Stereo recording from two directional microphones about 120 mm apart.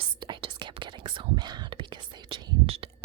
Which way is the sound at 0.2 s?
40° right (ahead or behind).